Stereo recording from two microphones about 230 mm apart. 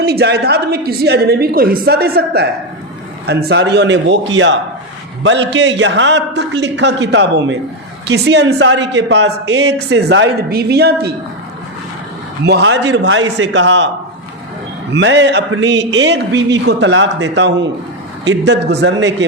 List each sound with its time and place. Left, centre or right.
0.0 s speech: right
12.5 s speech: right
14.9 s speech: right